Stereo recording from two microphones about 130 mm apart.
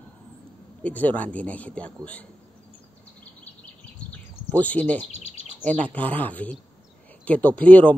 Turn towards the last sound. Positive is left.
turn(degrees=10)  # may be behind; listen again after turning